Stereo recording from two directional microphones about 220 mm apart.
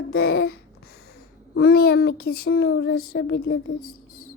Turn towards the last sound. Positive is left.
turn(degrees=45)  # may be behind; listen again after turning